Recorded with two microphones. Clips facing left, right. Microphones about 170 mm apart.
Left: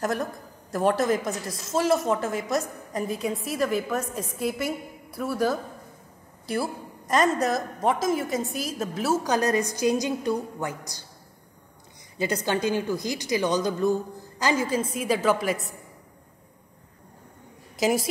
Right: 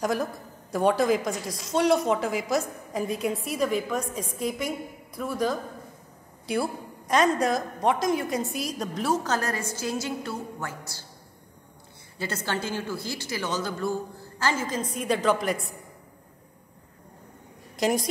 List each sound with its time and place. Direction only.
0.0 s a woman's voice: centre (ahead or behind); by 11.1 s 15° left (ahead or behind)
12.2 s a woman's voice: 15° left (ahead or behind)
17.7 s speech: centre (ahead or behind)